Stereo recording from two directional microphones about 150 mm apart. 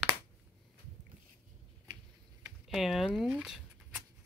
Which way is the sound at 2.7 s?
Centre (ahead or behind).